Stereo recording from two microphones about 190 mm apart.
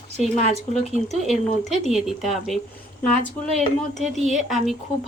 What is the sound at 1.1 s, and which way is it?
Speech, centre (ahead or behind).